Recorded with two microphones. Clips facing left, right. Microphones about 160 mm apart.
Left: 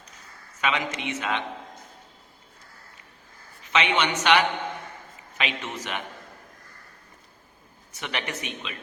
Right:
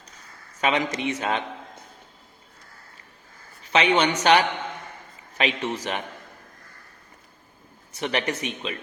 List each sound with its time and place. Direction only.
0.6 s a man's voice: 35° right (ahead or behind)
3.6 s a man's voice: 35° right (ahead or behind)
7.9 s a man's voice: 30° right (ahead or behind)